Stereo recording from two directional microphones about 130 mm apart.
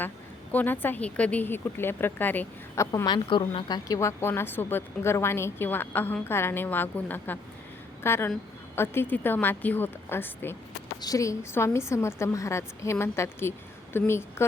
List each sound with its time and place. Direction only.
0.5 s speech: 15° left (ahead or behind)
3.2 s speech: 40° left (ahead or behind)
3.8 s a woman's voice: 25° left (ahead or behind)